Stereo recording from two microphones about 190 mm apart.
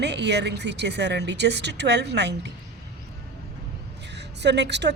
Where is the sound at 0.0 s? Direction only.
65° right (ahead or behind).